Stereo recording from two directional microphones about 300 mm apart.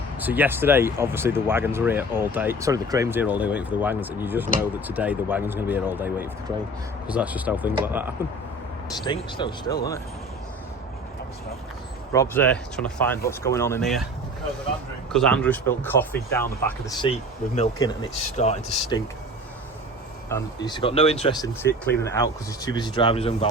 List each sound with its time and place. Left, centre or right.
0.2 s speech: centre
9.0 s speech: centre
12.1 s speech: centre
15.1 s speech: centre
20.3 s speech: centre